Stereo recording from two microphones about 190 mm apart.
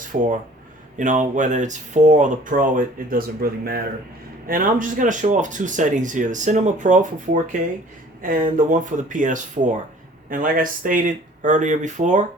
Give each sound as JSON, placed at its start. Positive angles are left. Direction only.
{"t": 0.0, "sound": "speech", "side_deg": -45}